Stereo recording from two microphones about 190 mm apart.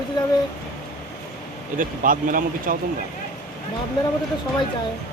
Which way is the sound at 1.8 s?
45° right (ahead or behind).